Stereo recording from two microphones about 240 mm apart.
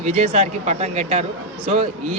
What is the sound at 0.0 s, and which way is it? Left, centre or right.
A man's voice, right.